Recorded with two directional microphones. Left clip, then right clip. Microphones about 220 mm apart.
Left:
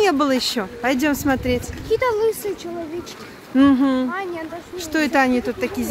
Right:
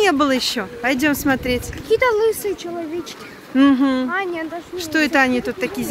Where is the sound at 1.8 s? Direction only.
35° right (ahead or behind).